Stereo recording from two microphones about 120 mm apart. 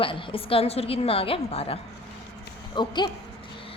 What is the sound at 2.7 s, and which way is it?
Speech, 35° left (ahead or behind).